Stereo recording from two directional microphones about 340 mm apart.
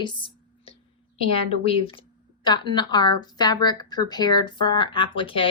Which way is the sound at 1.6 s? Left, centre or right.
Centre.